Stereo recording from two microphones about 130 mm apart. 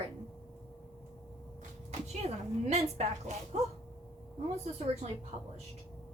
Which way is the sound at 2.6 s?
60° right (ahead or behind).